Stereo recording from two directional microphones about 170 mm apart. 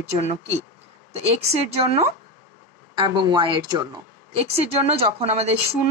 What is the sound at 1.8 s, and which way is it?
Speech, 35° right (ahead or behind).